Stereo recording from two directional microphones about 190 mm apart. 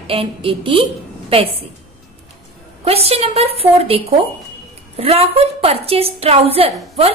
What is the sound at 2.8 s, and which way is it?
A woman's voice, 30° right (ahead or behind).